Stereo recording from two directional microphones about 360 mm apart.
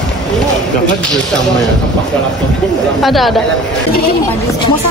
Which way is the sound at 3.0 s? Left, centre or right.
Centre.